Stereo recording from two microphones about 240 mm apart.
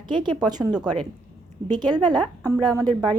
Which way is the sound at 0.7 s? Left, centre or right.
Centre.